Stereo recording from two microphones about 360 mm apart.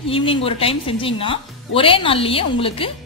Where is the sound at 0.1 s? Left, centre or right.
Centre.